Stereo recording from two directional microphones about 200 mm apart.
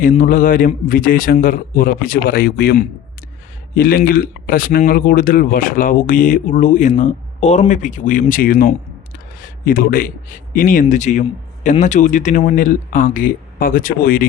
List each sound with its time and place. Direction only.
0.0 s a man's voice: 45° left (ahead or behind)